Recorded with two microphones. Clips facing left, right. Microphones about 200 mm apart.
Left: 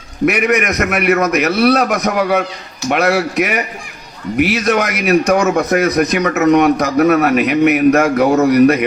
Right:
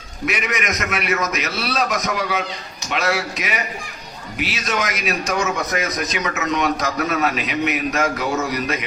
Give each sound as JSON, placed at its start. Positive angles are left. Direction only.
{"t": 0.3, "sound": "speech", "side_deg": 60}